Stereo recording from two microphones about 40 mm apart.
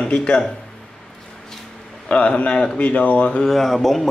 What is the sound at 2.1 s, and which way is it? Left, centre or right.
Speech, left.